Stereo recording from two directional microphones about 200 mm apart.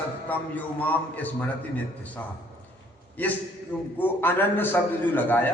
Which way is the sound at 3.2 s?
10° left (ahead or behind).